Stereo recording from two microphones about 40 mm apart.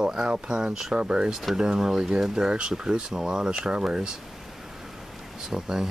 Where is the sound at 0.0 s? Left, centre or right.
Centre.